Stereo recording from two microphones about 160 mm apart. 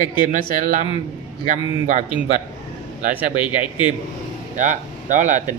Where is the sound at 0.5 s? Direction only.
55° right (ahead or behind).